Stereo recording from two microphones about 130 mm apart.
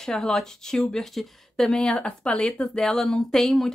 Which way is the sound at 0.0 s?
5° left (ahead or behind).